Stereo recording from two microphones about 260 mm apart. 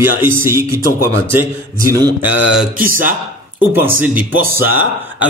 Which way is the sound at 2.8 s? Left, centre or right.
Right.